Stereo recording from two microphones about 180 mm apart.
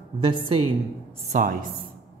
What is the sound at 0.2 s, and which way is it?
Speech, 30° right (ahead or behind).